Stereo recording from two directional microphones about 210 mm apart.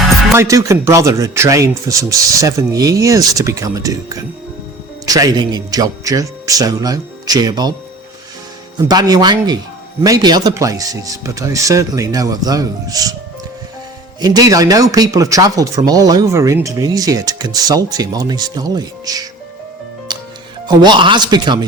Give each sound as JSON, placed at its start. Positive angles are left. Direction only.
{"t": 0.3, "sound": "speech", "side_deg": -15}
{"t": 8.8, "sound": "speech", "side_deg": -20}
{"t": 14.2, "sound": "speech", "side_deg": -20}
{"t": 20.1, "sound": "music", "side_deg": -20}
{"t": 20.7, "sound": "speech", "side_deg": -20}